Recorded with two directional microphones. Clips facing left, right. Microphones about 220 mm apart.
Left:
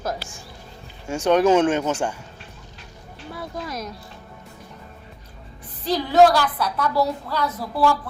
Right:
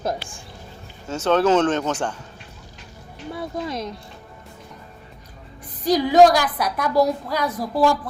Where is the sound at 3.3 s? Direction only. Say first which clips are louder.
Right 4 dB; 25° right (ahead or behind).